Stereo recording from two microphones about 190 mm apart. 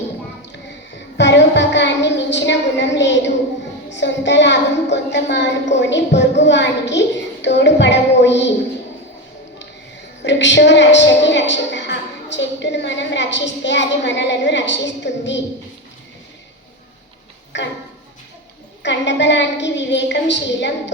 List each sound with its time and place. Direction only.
1.1 s a woman's voice: 70° left (ahead or behind)
10.2 s a woman's voice: 70° left (ahead or behind)
17.5 s a woman's voice: 70° left (ahead or behind)
18.8 s a woman's voice: 70° left (ahead or behind)